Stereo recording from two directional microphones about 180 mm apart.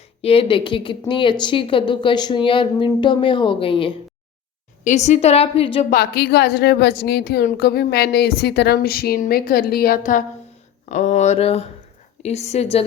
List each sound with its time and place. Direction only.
0.2 s a woman's voice: 30° left (ahead or behind)
4.8 s a woman's voice: 40° left (ahead or behind)
5.9 s a woman's voice: 60° left (ahead or behind); by 12.6 s 35° left (ahead or behind)